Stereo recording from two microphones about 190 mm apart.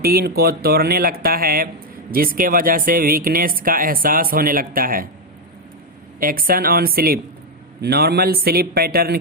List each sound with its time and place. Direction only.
0.0 s speech: 55° right (ahead or behind)
6.1 s a man's voice: 50° right (ahead or behind)